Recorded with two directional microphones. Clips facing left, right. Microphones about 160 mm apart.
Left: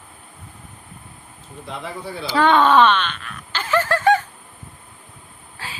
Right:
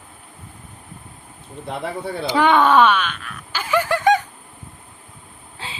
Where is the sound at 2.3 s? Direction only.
10° right (ahead or behind).